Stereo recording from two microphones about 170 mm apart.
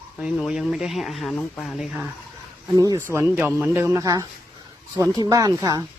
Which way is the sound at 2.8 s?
20° right (ahead or behind).